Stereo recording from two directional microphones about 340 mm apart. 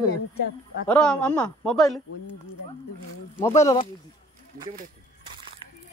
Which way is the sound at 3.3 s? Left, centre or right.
Centre.